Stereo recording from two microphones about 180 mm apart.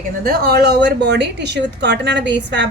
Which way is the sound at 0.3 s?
60° right (ahead or behind).